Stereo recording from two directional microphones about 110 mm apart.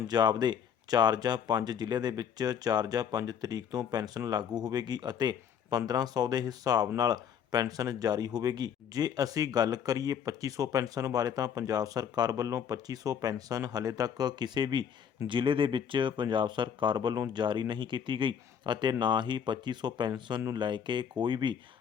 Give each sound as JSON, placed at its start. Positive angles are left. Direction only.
{"t": 0.1, "sound": "speech", "side_deg": -40}